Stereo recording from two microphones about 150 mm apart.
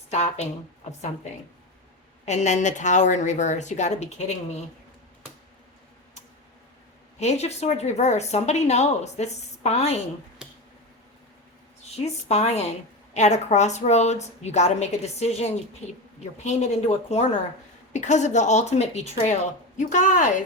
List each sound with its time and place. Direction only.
0.1 s speech: 50° left (ahead or behind)
2.2 s speech: 50° left (ahead or behind)
7.2 s speech: 45° left (ahead or behind)
11.9 s speech: 45° left (ahead or behind)